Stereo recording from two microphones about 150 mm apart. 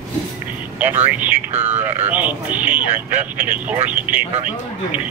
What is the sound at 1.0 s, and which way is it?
Speech, 10° right (ahead or behind).